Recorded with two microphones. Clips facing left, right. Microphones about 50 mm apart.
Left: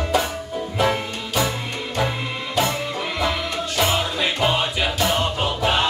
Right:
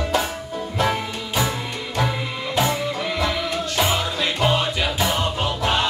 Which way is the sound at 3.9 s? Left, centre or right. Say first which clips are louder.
Left 1 dB; centre.